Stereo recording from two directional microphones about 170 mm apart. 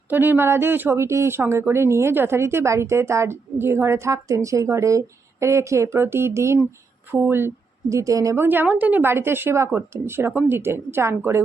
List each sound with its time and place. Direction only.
0.1 s speech: 10° right (ahead or behind)